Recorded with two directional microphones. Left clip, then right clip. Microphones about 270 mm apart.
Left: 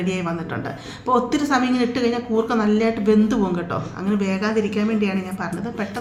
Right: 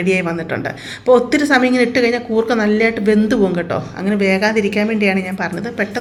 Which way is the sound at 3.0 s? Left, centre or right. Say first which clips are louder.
Right 5 dB; centre.